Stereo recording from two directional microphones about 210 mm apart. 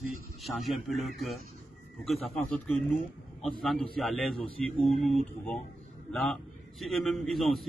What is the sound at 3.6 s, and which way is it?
Speech, centre (ahead or behind).